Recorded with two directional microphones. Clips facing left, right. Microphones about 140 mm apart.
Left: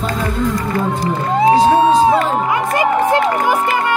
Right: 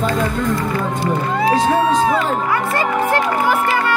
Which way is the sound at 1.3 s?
25° left (ahead or behind).